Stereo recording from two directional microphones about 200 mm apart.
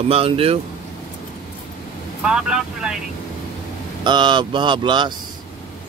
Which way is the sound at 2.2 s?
5° right (ahead or behind).